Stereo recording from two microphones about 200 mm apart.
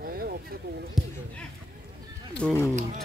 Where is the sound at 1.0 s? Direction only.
Centre (ahead or behind).